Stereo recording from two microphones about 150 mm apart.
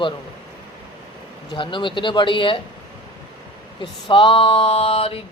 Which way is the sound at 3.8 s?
35° left (ahead or behind).